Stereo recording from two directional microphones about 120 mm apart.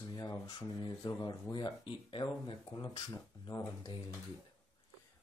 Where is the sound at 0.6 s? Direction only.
35° left (ahead or behind).